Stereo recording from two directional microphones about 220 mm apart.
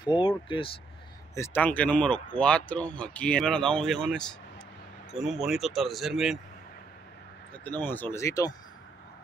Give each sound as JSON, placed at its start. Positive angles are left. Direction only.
{"t": 0.0, "sound": "speech", "side_deg": 20}
{"t": 1.3, "sound": "speech", "side_deg": 10}
{"t": 7.6, "sound": "speech", "side_deg": 10}